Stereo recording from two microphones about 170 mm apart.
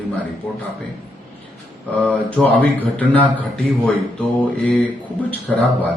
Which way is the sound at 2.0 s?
5° left (ahead or behind).